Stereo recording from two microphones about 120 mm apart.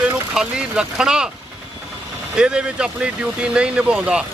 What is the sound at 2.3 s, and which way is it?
Speech, 5° right (ahead or behind).